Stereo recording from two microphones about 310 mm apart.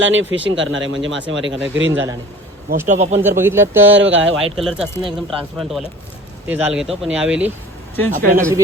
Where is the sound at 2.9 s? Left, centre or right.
Right.